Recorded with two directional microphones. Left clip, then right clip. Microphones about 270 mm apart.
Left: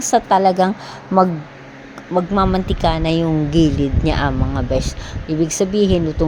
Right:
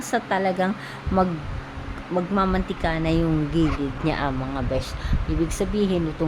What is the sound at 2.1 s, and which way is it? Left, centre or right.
A woman's voice, centre.